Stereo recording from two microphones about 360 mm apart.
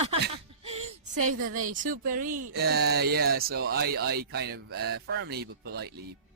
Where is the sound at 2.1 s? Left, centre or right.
Right.